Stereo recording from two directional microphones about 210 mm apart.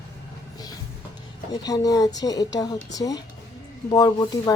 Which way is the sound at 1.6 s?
15° left (ahead or behind).